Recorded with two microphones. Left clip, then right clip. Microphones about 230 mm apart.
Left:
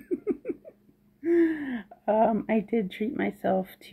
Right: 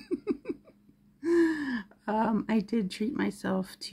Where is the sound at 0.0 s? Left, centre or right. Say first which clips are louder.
Left 3 dB; right.